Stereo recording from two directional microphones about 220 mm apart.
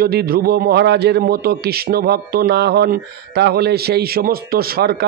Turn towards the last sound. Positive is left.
turn(degrees=-45)  # may be behind; listen again after turning